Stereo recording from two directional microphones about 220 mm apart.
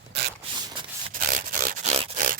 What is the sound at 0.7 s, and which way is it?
Rub, 20° right (ahead or behind).